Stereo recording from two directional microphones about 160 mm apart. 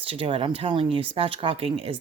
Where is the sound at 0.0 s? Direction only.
35° right (ahead or behind).